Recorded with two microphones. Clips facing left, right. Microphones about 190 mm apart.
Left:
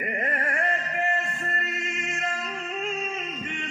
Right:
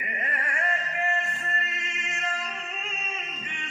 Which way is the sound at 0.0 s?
50° left (ahead or behind).